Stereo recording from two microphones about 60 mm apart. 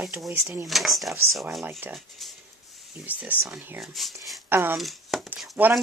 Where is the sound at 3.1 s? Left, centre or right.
Right.